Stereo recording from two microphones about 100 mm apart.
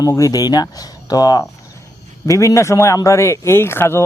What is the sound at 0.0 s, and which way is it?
Speech, 35° left (ahead or behind).